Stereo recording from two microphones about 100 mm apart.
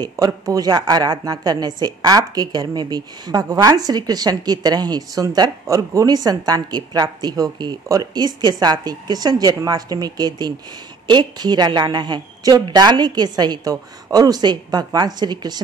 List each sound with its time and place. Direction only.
0.1 s a woman's voice: 35° right (ahead or behind)